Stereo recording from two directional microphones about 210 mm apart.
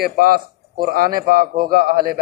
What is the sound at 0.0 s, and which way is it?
Speech, 45° right (ahead or behind).